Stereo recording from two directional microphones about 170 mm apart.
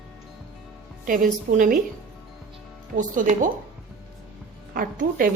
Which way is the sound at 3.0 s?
50° right (ahead or behind).